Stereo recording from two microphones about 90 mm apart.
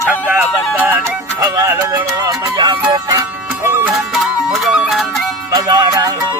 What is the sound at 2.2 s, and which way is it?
Music, 50° right (ahead or behind).